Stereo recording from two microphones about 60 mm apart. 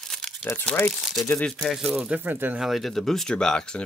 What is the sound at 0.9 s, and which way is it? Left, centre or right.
Speech, centre.